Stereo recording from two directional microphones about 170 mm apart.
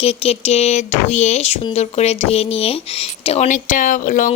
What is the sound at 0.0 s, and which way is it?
Speech, 35° left (ahead or behind).